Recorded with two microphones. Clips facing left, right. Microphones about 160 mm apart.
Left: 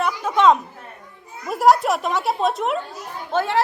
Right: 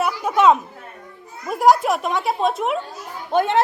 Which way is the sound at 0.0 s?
10° right (ahead or behind).